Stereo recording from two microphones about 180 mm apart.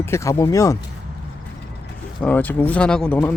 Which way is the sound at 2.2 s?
10° left (ahead or behind).